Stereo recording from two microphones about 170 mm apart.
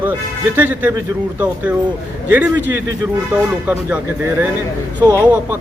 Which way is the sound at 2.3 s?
10° right (ahead or behind).